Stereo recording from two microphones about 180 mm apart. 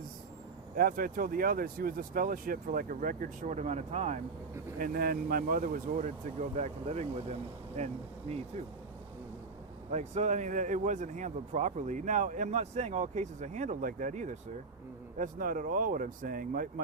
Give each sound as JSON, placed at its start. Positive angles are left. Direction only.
{"t": 0.8, "sound": "speech", "side_deg": -50}
{"t": 4.8, "sound": "speech", "side_deg": -55}
{"t": 6.6, "sound": "speech", "side_deg": -35}
{"t": 9.9, "sound": "speech", "side_deg": -40}